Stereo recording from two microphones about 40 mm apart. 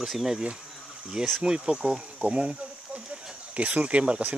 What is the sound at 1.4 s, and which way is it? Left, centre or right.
Speech, centre.